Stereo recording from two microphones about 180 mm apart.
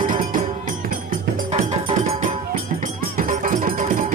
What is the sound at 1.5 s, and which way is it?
Music, 35° right (ahead or behind).